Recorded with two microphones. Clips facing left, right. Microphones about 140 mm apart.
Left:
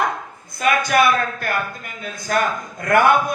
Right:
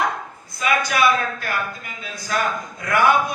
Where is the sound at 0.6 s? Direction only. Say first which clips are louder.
Left 3 dB; 50° left (ahead or behind).